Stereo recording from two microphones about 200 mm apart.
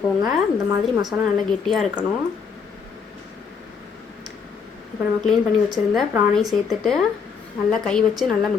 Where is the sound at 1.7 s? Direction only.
Centre (ahead or behind).